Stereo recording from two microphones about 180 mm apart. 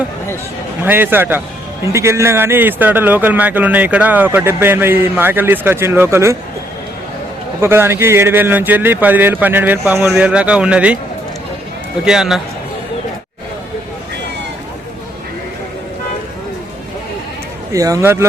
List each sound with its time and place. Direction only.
0.8 s speech: 10° right (ahead or behind)
7.6 s speech: 15° right (ahead or behind)
12.0 s a man's voice: 5° right (ahead or behind)
17.7 s speech: 20° right (ahead or behind)